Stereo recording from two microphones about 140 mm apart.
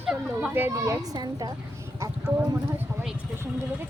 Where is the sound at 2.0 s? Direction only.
20° right (ahead or behind).